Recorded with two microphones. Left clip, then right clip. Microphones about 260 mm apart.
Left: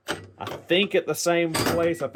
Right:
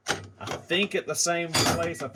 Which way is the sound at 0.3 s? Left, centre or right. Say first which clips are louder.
Left 6 dB; left.